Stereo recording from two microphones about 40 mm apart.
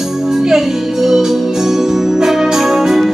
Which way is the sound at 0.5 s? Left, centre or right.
Centre.